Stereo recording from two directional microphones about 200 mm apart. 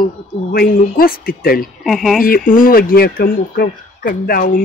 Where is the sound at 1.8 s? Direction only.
Centre (ahead or behind).